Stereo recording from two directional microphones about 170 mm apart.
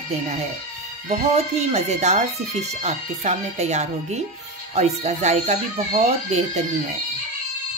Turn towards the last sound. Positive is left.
turn(degrees=-40)  # may be behind; listen again after turning